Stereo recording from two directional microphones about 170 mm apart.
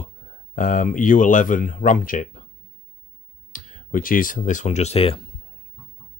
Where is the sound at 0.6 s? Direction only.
50° left (ahead or behind).